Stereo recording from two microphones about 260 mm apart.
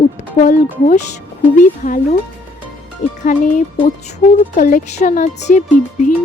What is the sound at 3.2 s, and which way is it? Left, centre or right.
Speech, left.